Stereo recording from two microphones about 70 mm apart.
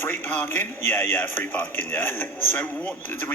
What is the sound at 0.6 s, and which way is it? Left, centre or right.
A man's voice, left.